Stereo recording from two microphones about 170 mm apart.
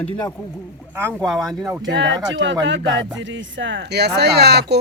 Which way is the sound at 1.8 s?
90° right.